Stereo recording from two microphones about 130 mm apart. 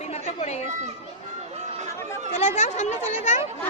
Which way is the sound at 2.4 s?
65° left (ahead or behind).